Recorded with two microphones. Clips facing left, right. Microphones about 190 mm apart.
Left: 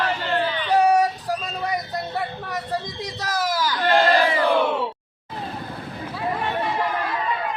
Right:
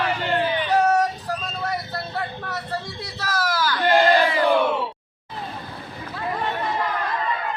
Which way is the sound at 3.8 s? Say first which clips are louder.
Right 1 dB; 10° right (ahead or behind).